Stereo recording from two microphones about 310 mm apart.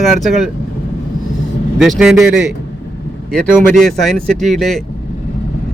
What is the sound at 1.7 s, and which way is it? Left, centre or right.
Speech, centre.